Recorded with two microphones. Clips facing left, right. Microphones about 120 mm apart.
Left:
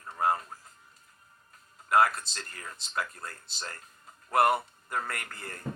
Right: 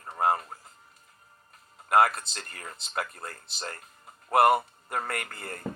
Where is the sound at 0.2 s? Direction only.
60° right (ahead or behind).